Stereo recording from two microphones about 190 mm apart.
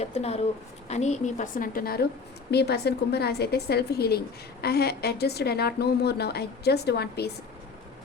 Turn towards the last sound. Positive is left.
turn(degrees=60)  # may be behind; listen again after turning